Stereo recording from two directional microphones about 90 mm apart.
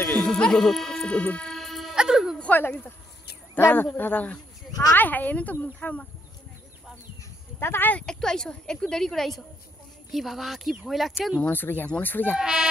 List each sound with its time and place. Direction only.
0.0 s speech: 15° left (ahead or behind); by 2.3 s 5° right (ahead or behind)
2.3 s a sound: 15° left (ahead or behind)
2.6 s a woman's voice: 20° left (ahead or behind)
7.5 s speech: 25° left (ahead or behind)
8.0 s speech: 10° left (ahead or behind)
11.4 s a woman's voice: 20° left (ahead or behind)
12.4 s speech: 5° right (ahead or behind)